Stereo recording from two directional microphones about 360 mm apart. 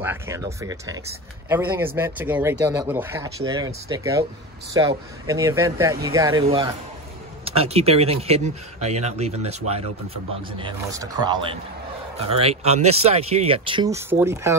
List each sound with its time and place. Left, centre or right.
0.0 s speech: centre